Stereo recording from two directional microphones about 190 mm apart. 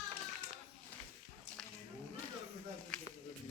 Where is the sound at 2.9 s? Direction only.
5° left (ahead or behind).